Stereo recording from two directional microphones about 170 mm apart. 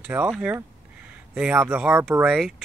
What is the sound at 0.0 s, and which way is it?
Speech, 10° right (ahead or behind).